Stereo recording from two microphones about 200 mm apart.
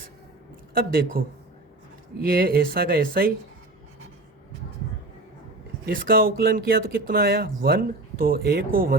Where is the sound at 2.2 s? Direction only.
45° right (ahead or behind).